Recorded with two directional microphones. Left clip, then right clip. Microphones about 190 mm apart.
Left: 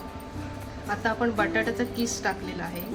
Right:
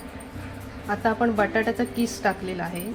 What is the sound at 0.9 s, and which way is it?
A woman's voice, 45° right (ahead or behind).